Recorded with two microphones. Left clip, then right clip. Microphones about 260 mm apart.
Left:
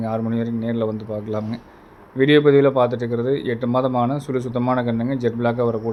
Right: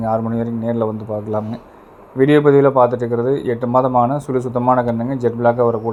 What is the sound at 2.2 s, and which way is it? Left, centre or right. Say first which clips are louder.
Speech: right 2 dB; centre.